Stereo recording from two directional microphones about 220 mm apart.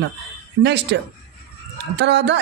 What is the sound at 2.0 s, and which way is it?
Speech, 50° right (ahead or behind).